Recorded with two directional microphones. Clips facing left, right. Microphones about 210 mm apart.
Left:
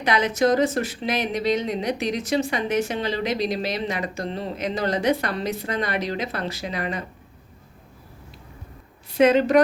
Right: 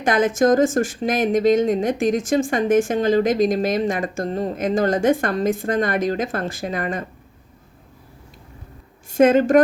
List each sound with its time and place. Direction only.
0.0 s speech: 50° right (ahead or behind)
9.0 s a woman's voice: 45° right (ahead or behind)